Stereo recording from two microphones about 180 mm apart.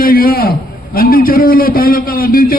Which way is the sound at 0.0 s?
55° left (ahead or behind).